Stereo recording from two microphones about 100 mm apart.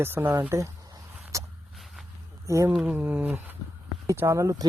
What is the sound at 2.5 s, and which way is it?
Speech, 30° right (ahead or behind).